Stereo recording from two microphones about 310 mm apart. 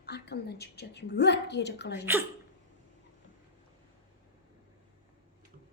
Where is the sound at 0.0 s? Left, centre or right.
Left.